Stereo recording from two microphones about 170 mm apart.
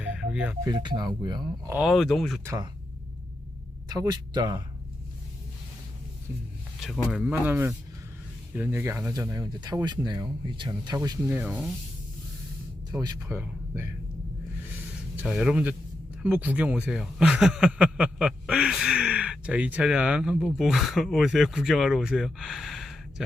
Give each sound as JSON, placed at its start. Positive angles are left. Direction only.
{"t": 0.0, "sound": "music", "side_deg": -5}
{"t": 0.6, "sound": "speech", "side_deg": -25}
{"t": 1.7, "sound": "speech", "side_deg": 0}
{"t": 2.4, "sound": "speech", "side_deg": -15}
{"t": 3.8, "sound": "speech", "side_deg": -20}
{"t": 6.7, "sound": "speech", "side_deg": 0}
{"t": 11.3, "sound": "speech", "side_deg": -10}
{"t": 13.2, "sound": "speech", "side_deg": -15}
{"t": 15.1, "sound": "speech", "side_deg": -5}